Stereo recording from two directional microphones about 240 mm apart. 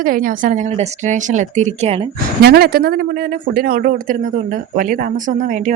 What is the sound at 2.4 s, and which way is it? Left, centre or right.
A woman's voice, right.